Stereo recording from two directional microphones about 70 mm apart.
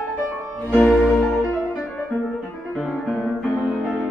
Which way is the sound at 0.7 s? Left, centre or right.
Left.